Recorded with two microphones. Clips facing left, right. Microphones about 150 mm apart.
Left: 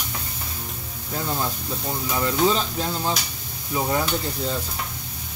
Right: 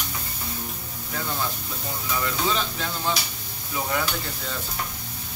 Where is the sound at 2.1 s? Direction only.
30° left (ahead or behind).